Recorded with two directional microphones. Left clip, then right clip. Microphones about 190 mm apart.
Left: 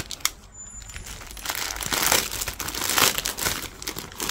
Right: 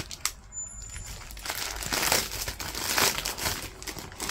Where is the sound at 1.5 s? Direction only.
25° left (ahead or behind).